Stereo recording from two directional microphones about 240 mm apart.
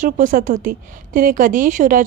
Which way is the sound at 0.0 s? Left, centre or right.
Right.